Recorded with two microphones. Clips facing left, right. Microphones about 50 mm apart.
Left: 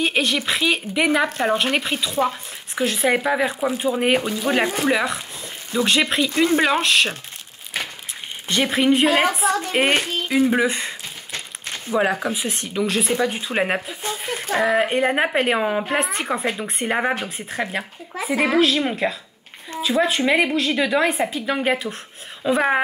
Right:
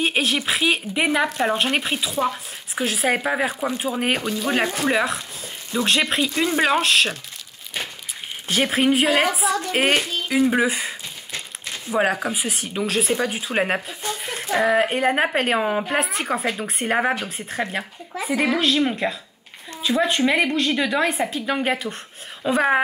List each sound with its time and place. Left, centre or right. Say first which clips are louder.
0.0 s a woman's voice: left 1 dB; centre
8.5 s a woman's voice: left 1 dB; centre
11.9 s speech: left 1 dB; right
12.3 s a woman's voice: left 1 dB; centre
18.3 s speech: left 1 dB; left
18.8 s a woman's voice: even; centre